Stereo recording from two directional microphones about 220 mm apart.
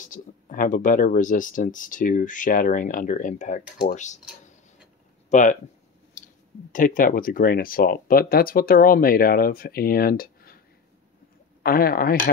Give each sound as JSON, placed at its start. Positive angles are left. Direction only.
{"t": 0.0, "sound": "speech", "side_deg": 35}
{"t": 5.3, "sound": "speech", "side_deg": 35}
{"t": 11.6, "sound": "speech", "side_deg": 40}